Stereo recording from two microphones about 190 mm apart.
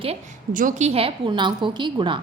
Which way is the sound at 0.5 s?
45° right (ahead or behind).